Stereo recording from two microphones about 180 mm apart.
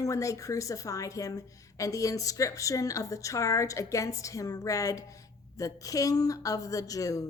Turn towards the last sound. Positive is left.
turn(degrees=20)  # may be behind; listen again after turning